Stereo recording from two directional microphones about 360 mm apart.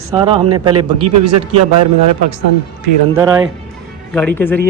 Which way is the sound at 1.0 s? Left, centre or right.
Right.